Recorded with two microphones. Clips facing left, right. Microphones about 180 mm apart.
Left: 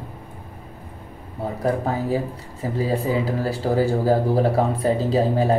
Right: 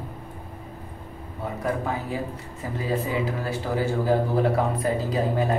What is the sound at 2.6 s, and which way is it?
Speech, 35° left (ahead or behind).